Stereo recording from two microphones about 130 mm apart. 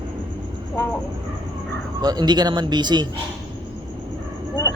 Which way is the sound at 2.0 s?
30° right (ahead or behind).